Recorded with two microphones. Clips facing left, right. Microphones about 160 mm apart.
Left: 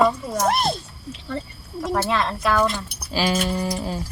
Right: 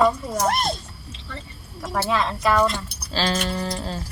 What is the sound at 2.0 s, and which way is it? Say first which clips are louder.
Speech: right 1 dB; centre (ahead or behind).